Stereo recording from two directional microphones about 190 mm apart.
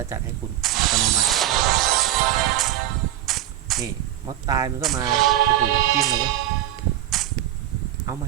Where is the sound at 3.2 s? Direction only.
Centre (ahead or behind).